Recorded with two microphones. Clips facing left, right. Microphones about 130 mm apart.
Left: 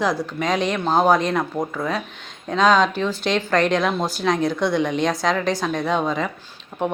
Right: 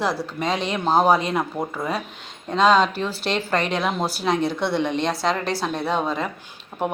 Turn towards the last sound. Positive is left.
turn(degrees=0)  # may be behind; listen again after turning